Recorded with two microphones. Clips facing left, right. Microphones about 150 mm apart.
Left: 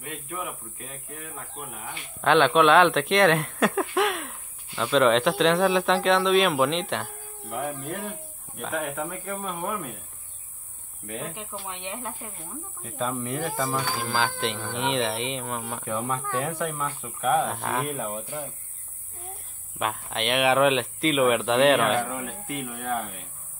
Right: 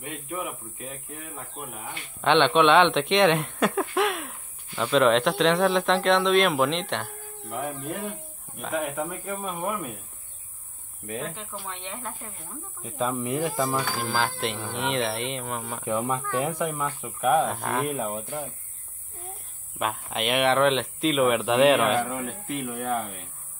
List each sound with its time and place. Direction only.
0.0 s speech: centre (ahead or behind)
11.1 s speech: 10° left (ahead or behind)
12.8 s speech: 15° right (ahead or behind)
13.7 s speech: 5° right (ahead or behind)
15.8 s speech: 15° right (ahead or behind)
17.5 s speech: centre (ahead or behind)
17.9 s speech: 20° right (ahead or behind)
19.8 s speech: centre (ahead or behind)